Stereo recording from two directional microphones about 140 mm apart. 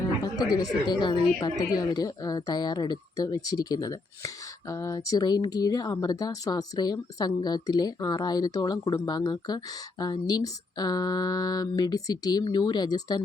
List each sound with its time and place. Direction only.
0.3 s speech: 25° left (ahead or behind)